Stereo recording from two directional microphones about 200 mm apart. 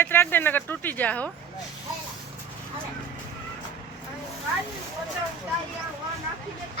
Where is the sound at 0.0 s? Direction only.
10° left (ahead or behind).